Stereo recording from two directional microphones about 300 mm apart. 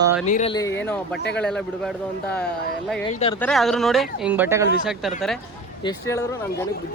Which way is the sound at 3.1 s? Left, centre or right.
Left.